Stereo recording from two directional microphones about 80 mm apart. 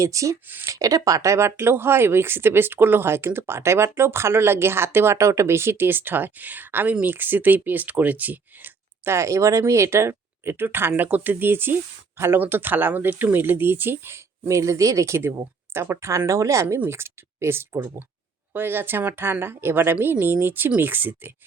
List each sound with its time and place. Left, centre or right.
0.0 s speech: right
9.1 s speech: right